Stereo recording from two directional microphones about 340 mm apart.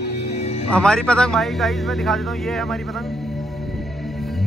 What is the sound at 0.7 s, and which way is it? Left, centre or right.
Speech, centre.